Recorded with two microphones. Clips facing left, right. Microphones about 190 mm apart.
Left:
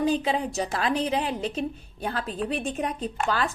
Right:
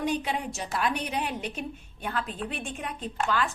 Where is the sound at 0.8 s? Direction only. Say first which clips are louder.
Left 2 dB; 90° left.